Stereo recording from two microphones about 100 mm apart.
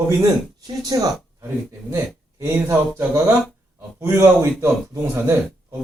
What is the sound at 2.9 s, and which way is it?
A man's voice, 30° right (ahead or behind).